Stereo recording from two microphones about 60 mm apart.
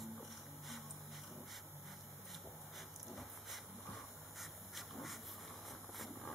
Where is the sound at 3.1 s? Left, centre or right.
Centre.